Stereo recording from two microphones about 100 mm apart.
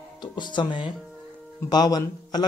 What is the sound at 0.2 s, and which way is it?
Speech, 50° left (ahead or behind).